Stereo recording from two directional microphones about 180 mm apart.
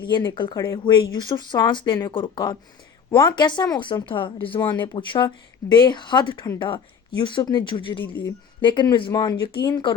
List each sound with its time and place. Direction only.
0.0 s speech: 20° left (ahead or behind)